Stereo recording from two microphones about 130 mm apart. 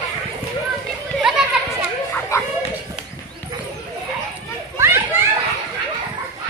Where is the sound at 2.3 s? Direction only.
25° left (ahead or behind).